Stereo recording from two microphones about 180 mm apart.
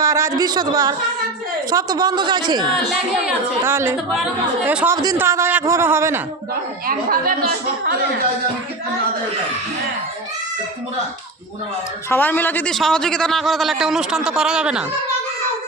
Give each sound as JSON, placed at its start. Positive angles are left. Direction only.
{"t": 0.0, "sound": "a woman's voice", "side_deg": -15}
{"t": 2.9, "sound": "speech", "side_deg": -10}
{"t": 6.5, "sound": "speech", "side_deg": -55}
{"t": 12.0, "sound": "a man's voice", "side_deg": 10}